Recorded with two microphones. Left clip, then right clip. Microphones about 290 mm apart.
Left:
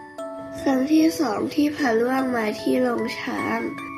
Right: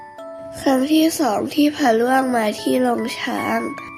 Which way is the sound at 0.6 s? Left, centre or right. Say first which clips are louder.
Right 3 dB; right.